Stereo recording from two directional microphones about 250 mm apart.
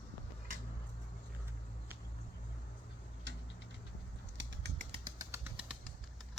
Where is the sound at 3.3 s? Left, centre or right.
Right.